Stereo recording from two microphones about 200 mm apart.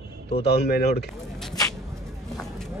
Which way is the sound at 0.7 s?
50° left (ahead or behind).